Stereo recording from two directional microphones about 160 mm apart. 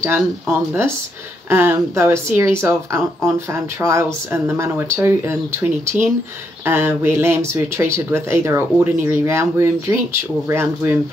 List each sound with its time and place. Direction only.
0.0 s speech: 15° right (ahead or behind)